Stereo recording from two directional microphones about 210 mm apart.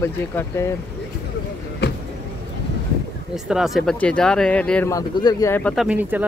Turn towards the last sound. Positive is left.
turn(degrees=-10)  # may be behind; listen again after turning